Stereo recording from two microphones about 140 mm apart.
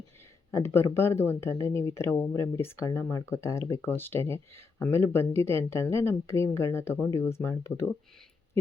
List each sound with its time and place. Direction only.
0.5 s speech: 20° left (ahead or behind)